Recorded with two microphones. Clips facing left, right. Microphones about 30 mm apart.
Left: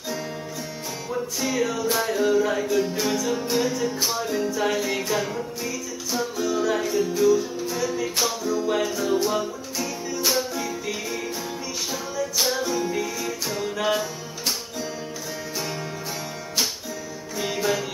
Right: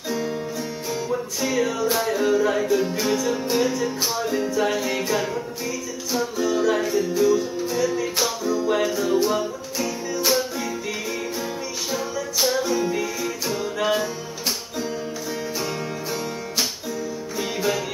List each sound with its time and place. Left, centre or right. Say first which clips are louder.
1.0 s music: even; centre
17.4 s music: even; centre